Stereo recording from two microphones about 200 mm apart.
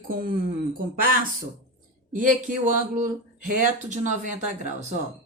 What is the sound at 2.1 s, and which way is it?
Speech, 40° right (ahead or behind).